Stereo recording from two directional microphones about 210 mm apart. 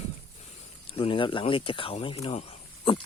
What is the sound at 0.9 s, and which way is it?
Speech, 25° left (ahead or behind).